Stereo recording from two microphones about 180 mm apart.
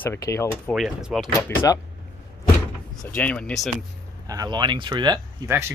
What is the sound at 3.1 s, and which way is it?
Speech, 5° left (ahead or behind).